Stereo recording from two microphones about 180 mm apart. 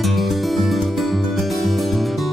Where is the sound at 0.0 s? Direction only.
Centre (ahead or behind).